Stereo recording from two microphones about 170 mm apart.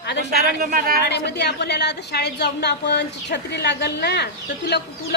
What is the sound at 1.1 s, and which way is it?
A woman's voice, 75° left (ahead or behind).